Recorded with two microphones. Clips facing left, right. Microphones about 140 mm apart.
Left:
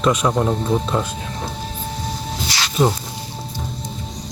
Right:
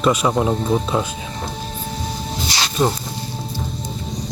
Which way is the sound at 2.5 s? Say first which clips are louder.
Right 2 dB; 20° right (ahead or behind).